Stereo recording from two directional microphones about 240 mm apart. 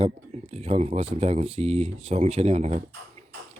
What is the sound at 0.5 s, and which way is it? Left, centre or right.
Speech, right.